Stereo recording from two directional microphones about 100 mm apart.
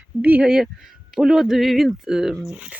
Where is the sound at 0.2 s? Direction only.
15° right (ahead or behind).